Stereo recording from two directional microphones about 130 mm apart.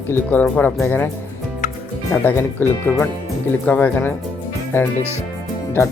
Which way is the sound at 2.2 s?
15° left (ahead or behind).